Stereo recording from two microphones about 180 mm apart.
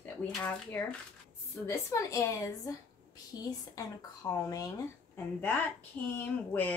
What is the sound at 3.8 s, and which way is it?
Speech, 20° left (ahead or behind).